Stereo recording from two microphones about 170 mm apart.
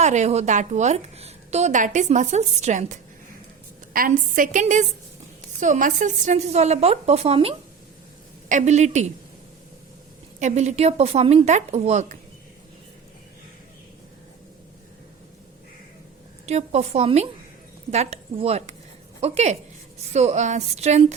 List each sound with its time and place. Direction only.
0.0 s a woman's voice: 40° right (ahead or behind)
3.9 s a woman's voice: 55° right (ahead or behind)
10.4 s a woman's voice: 40° right (ahead or behind)
16.5 s a woman's voice: 40° right (ahead or behind)